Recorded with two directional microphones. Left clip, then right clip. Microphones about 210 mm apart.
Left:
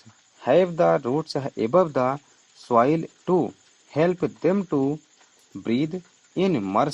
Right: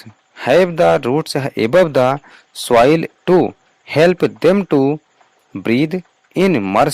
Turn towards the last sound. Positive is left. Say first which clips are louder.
# right 9 dB
turn(degrees=-40)  # may be behind; listen again after turning